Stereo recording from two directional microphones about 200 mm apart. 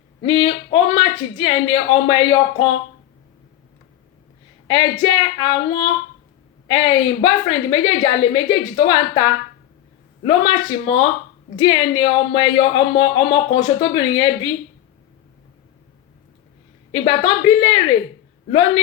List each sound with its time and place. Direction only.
0.2 s speech: 25° left (ahead or behind)
4.7 s speech: 25° left (ahead or behind)
17.1 s speech: 25° left (ahead or behind)